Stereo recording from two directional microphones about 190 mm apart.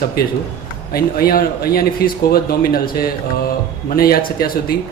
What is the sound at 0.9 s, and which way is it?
A man's voice, 50° left (ahead or behind).